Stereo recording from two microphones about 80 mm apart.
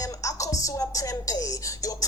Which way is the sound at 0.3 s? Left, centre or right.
Left.